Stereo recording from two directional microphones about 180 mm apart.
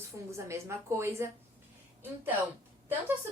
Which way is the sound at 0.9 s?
15° right (ahead or behind).